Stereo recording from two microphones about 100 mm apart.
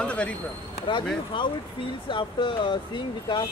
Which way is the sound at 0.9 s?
55° left (ahead or behind).